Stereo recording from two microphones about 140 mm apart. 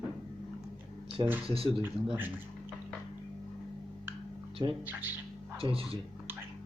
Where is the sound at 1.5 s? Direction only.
40° right (ahead or behind).